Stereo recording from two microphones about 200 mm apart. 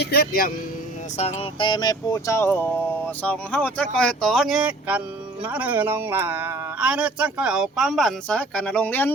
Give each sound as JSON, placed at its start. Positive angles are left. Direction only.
{"t": 0.0, "sound": "speech", "side_deg": 50}
{"t": 1.1, "sound": "speech", "side_deg": 30}